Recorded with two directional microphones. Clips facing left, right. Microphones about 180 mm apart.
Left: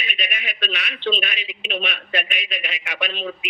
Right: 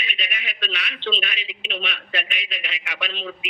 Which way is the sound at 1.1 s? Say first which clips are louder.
Left 4 dB; 45° left (ahead or behind).